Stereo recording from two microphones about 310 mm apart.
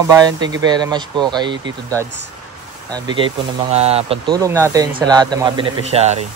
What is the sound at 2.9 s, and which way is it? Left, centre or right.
Speech, centre.